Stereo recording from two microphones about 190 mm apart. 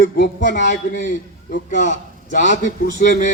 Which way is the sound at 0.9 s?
40° left (ahead or behind).